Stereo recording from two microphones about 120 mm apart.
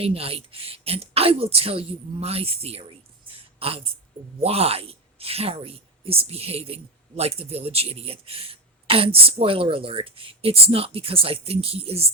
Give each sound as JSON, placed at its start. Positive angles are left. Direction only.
{"t": 0.0, "sound": "a man's voice", "side_deg": -55}
{"t": 3.2, "sound": "a sound", "side_deg": -50}
{"t": 4.4, "sound": "a man's voice", "side_deg": -55}